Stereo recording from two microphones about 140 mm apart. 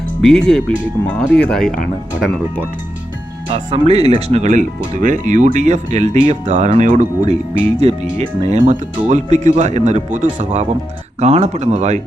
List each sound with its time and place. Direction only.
0.2 s speech: 5° left (ahead or behind)
3.5 s speech: 45° right (ahead or behind)